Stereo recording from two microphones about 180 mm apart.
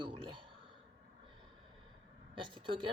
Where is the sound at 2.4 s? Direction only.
25° right (ahead or behind).